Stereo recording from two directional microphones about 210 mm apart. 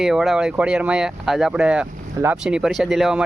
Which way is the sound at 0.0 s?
Centre (ahead or behind).